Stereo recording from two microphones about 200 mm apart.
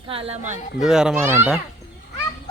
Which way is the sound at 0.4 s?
5° right (ahead or behind).